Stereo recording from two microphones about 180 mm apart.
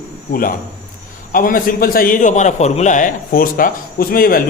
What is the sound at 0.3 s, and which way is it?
A man's voice, 50° left (ahead or behind).